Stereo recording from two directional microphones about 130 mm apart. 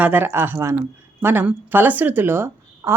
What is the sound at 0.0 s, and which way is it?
Speech, 15° right (ahead or behind).